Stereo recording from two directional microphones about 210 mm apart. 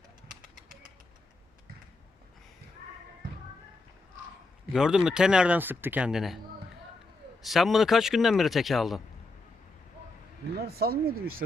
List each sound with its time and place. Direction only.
4.7 s a man's voice: 5° right (ahead or behind)
7.4 s a man's voice: centre (ahead or behind)
10.6 s speech: 50° right (ahead or behind)